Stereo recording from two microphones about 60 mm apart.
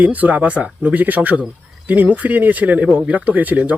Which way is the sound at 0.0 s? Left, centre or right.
Right.